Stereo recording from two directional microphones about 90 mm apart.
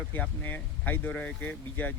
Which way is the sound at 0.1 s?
20° left (ahead or behind).